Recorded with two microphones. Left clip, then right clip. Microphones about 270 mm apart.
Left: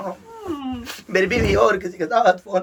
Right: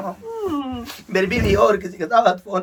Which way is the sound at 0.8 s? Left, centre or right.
Centre.